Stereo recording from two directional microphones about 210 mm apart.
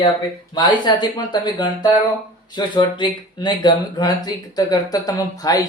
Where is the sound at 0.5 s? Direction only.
20° left (ahead or behind).